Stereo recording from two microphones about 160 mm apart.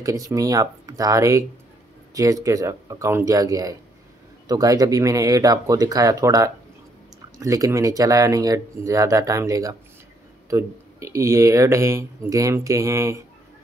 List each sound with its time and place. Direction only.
0.0 s speech: 20° right (ahead or behind)